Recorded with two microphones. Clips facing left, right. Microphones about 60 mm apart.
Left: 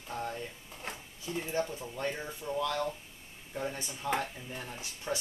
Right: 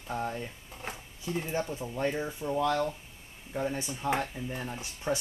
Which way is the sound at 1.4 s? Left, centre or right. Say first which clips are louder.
Left 1 dB; right.